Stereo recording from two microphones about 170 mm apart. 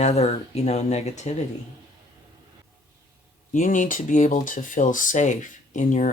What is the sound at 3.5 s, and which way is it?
Speech, 50° left (ahead or behind).